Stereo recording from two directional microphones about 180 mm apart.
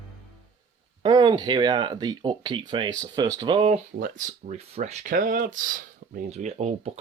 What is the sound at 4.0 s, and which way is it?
Speech, 50° right (ahead or behind).